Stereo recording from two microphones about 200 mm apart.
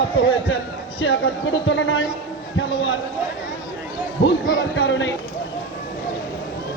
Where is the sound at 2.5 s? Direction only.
75° left (ahead or behind).